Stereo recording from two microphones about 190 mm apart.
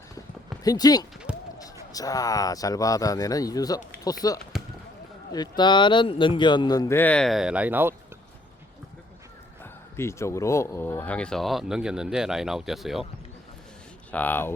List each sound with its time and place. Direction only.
0.6 s speech: 20° left (ahead or behind); by 7.9 s 10° right (ahead or behind)
10.0 s speech: 15° left (ahead or behind); by 13.1 s centre (ahead or behind)
14.1 s speech: 10° left (ahead or behind)